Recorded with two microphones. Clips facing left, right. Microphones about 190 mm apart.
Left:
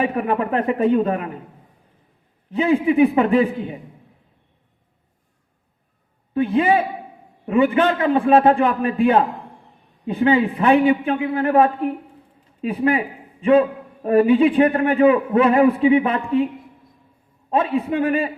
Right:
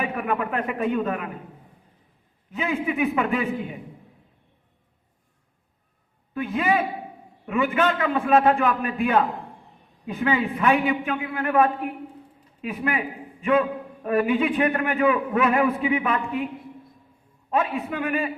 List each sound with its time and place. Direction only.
0.0 s a man's voice: 30° left (ahead or behind)
2.5 s a man's voice: 35° left (ahead or behind)
6.3 s a man's voice: 30° left (ahead or behind)
17.5 s a man's voice: 30° left (ahead or behind)